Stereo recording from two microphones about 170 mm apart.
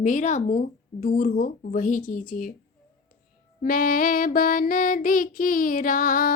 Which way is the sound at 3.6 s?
55° left (ahead or behind).